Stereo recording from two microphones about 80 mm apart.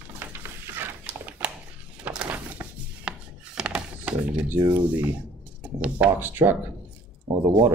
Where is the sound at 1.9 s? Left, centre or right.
Centre.